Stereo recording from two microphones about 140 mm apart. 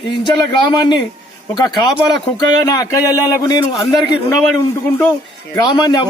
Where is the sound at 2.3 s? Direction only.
25° left (ahead or behind).